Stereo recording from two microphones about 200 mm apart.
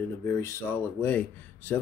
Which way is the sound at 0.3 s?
15° left (ahead or behind).